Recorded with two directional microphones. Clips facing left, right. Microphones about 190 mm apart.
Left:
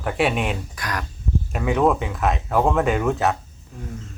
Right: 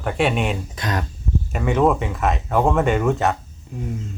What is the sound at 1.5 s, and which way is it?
Speech, centre (ahead or behind).